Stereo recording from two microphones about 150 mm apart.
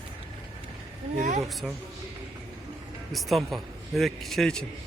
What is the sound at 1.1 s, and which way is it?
Speech, 55° right (ahead or behind).